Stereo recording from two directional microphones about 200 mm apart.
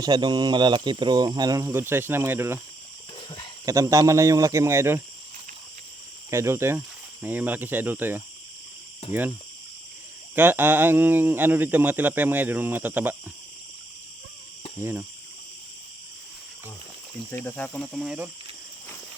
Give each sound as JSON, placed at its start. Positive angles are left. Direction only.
{"t": 0.0, "sound": "speech", "side_deg": -20}
{"t": 3.2, "sound": "cricket", "side_deg": 25}
{"t": 3.7, "sound": "speech", "side_deg": -15}
{"t": 6.3, "sound": "speech", "side_deg": -15}
{"t": 10.3, "sound": "speech", "side_deg": -10}
{"t": 14.8, "sound": "speech", "side_deg": -10}
{"t": 17.3, "sound": "speech", "side_deg": 10}